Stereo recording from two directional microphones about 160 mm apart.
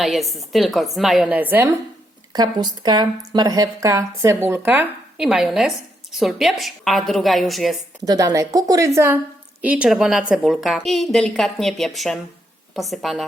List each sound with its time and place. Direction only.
0.0 s speech: centre (ahead or behind)
2.3 s speech: 25° right (ahead or behind); by 7.8 s centre (ahead or behind)
8.0 s a woman's voice: 25° right (ahead or behind); by 13.2 s centre (ahead or behind)